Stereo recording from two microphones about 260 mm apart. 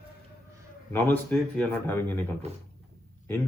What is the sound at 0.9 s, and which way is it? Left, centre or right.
Speech, centre.